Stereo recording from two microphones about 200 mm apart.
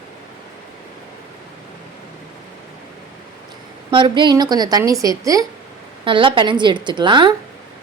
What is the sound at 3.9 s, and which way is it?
A woman's voice, 25° right (ahead or behind).